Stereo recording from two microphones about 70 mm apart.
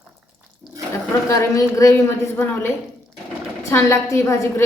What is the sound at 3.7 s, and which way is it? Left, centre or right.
Speech, left.